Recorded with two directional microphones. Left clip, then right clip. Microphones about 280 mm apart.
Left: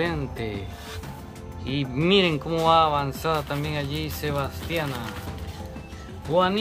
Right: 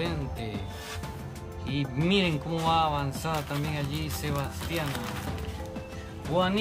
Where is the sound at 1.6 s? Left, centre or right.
Centre.